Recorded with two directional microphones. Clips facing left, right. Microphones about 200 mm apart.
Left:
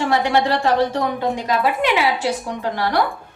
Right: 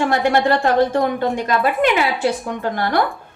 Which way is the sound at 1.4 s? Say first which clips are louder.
Right 2 dB; 55° right (ahead or behind).